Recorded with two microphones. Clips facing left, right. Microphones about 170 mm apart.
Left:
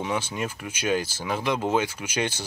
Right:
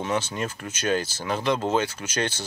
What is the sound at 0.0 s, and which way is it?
Speech, 10° left (ahead or behind).